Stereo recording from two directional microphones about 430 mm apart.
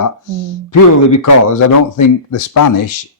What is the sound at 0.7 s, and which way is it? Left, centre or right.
Speech, left.